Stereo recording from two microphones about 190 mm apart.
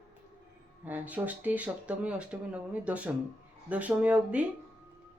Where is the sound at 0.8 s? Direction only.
10° right (ahead or behind).